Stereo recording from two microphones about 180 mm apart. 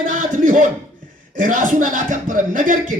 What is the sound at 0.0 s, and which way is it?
A man's voice, 45° right (ahead or behind).